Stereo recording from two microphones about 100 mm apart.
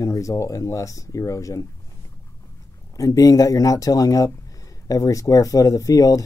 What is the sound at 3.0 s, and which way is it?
Speech, 35° left (ahead or behind).